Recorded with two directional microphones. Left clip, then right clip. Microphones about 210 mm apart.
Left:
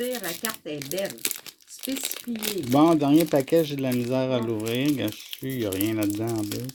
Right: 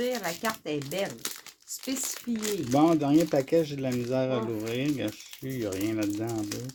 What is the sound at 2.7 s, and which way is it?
Speech, 35° left (ahead or behind).